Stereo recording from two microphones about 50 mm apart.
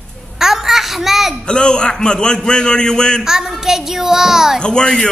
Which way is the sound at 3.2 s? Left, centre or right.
Centre.